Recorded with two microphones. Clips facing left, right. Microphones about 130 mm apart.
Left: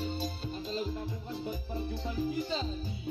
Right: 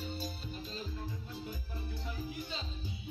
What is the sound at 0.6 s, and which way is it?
Music, 80° left.